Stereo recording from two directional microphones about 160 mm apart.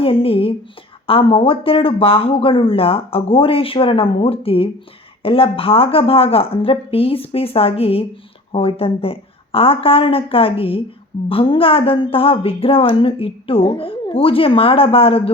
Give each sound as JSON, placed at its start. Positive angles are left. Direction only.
{"t": 0.0, "sound": "a woman's voice", "side_deg": 35}